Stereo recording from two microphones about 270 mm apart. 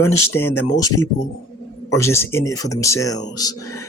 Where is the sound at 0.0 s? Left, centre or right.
Left.